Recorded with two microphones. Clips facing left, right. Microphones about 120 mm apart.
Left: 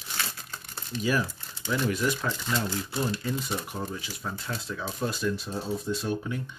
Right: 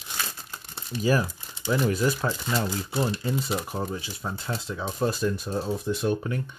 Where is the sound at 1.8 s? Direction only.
35° right (ahead or behind).